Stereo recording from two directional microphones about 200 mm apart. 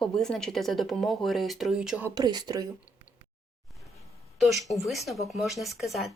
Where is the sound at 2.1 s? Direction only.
20° right (ahead or behind).